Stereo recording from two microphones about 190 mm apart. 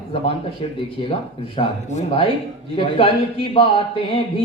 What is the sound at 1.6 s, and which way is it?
Music, 30° left (ahead or behind).